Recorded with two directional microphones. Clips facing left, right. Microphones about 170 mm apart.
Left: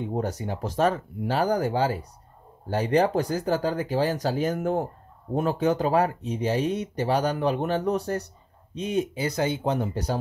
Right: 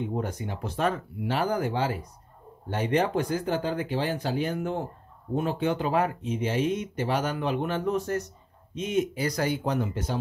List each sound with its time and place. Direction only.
0.1 s speech: 35° left (ahead or behind)